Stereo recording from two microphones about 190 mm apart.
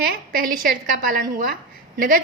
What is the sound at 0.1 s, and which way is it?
A woman's voice, 50° right (ahead or behind).